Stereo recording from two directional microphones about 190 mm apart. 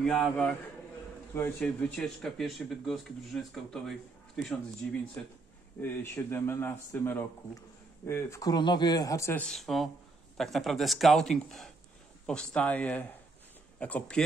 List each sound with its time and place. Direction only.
0.0 s speech: centre (ahead or behind)
5.2 s speech: 10° left (ahead or behind)
9.5 s speech: centre (ahead or behind)